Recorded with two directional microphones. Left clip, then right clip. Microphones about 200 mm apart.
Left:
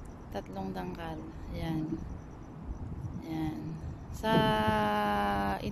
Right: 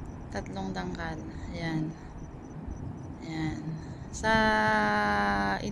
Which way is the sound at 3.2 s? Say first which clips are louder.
Right 1 dB; 5° left (ahead or behind).